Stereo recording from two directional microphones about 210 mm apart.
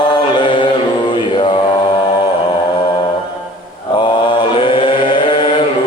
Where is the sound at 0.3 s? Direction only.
25° left (ahead or behind).